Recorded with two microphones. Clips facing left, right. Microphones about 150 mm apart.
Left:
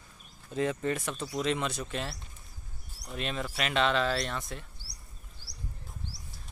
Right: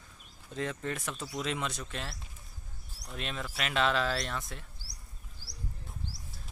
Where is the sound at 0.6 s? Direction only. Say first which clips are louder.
Left 6 dB; 5° left (ahead or behind).